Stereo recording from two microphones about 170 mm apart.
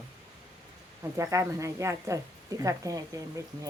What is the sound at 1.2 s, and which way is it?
A woman's voice, 15° right (ahead or behind).